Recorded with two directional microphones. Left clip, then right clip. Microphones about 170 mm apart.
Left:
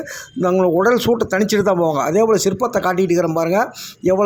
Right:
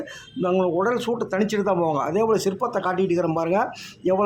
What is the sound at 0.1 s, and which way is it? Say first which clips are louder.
Speech: left 6 dB; 25° left (ahead or behind).